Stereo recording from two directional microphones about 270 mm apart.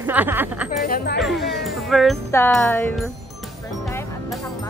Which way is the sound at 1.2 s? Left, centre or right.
Centre.